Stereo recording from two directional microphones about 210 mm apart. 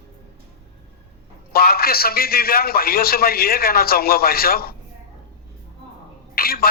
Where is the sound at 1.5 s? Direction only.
45° left (ahead or behind).